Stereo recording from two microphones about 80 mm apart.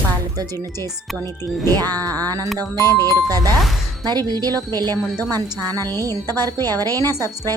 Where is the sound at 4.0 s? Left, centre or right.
Right.